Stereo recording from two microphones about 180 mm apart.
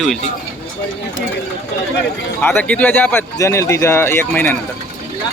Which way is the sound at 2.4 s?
10° left (ahead or behind).